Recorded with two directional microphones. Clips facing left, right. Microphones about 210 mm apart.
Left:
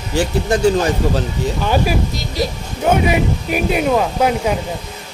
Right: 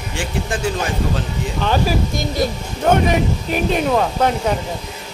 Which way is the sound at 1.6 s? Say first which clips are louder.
Even; 10° left (ahead or behind).